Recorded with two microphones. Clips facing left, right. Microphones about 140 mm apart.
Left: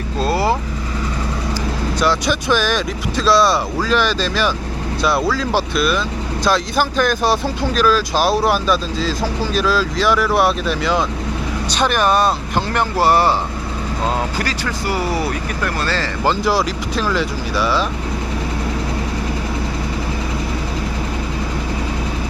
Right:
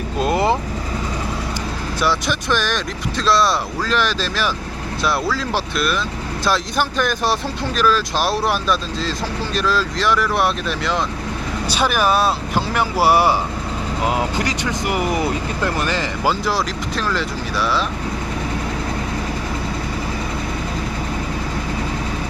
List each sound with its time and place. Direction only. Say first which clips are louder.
0.2 s vehicle: even; 20° right (ahead or behind)
2.0 s speech: left 2 dB; centre (ahead or behind); by 16.3 s 15° right (ahead or behind)
16.3 s speech: left 3 dB; centre (ahead or behind)